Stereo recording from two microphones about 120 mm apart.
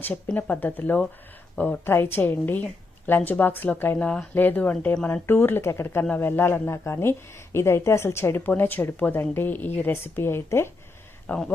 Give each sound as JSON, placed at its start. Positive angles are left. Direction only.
{"t": 0.0, "sound": "a woman's voice", "side_deg": 10}